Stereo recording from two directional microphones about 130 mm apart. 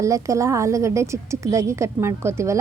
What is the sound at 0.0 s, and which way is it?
A woman's voice, 25° right (ahead or behind).